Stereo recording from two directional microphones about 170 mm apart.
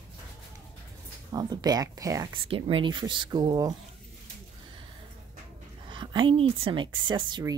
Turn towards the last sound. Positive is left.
turn(degrees=-25)  # may be behind; listen again after turning